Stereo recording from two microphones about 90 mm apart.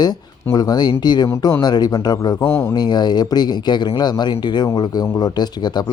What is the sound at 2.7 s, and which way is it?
Speech, 50° left (ahead or behind).